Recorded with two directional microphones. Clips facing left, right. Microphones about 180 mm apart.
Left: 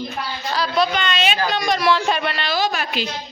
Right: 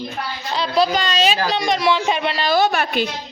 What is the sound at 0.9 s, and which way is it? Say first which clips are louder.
Speech: right 2 dB; 40° right (ahead or behind).